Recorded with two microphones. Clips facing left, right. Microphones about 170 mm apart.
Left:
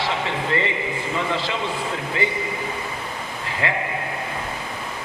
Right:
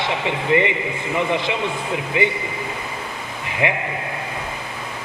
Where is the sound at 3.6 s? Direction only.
15° right (ahead or behind).